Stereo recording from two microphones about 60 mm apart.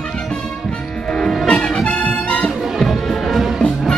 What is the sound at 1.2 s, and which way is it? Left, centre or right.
Music, centre.